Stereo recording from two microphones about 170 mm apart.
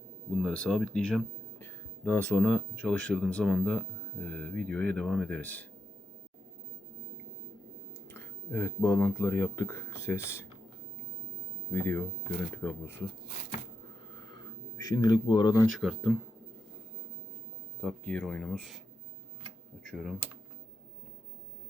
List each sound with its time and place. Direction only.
0.4 s speech: 5° left (ahead or behind)
8.1 s speech: 15° left (ahead or behind)
11.7 s speech: 10° left (ahead or behind)
14.8 s speech: 25° left (ahead or behind)
15.8 s speech: centre (ahead or behind)
17.8 s speech: 5° left (ahead or behind)
19.9 s speech: centre (ahead or behind)